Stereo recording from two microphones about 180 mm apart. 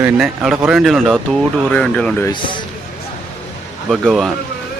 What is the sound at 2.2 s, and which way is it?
Speech, 25° left (ahead or behind).